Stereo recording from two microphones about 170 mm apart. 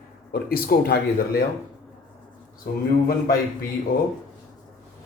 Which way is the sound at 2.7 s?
60° left (ahead or behind).